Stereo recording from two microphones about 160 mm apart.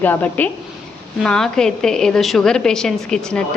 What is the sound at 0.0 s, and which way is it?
A woman's voice, 10° left (ahead or behind).